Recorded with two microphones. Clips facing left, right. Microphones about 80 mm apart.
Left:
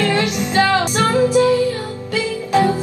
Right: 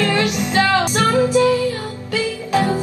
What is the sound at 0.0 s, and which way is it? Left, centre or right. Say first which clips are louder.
Music: even; left.